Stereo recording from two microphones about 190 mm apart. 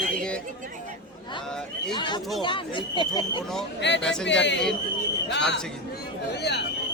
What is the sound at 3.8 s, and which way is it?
Speech, 65° left (ahead or behind).